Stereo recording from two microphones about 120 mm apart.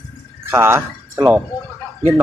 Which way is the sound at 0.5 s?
20° right (ahead or behind).